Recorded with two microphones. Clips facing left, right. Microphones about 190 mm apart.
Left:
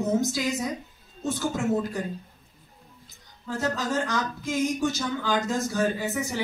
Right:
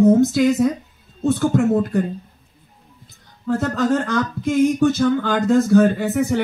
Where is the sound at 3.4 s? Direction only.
60° right (ahead or behind).